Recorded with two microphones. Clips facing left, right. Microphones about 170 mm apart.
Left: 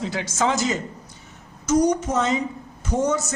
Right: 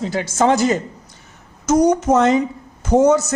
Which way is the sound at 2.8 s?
90° right.